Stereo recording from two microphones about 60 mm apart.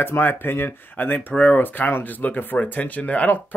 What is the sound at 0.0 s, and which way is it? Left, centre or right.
Speech, left.